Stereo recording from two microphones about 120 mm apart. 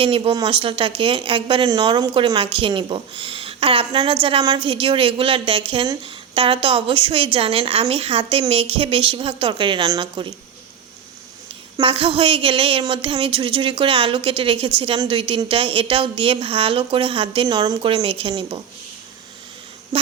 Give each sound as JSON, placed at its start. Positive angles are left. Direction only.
{"t": 0.0, "sound": "speech", "side_deg": -45}
{"t": 11.8, "sound": "speech", "side_deg": -50}
{"t": 17.9, "sound": "speech", "side_deg": -50}